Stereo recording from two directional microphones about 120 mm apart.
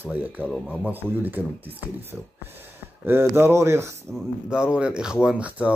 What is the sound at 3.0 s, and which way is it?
Speech, 20° right (ahead or behind).